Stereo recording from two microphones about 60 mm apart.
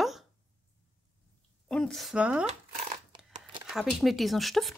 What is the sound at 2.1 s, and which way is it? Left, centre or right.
Speech, centre.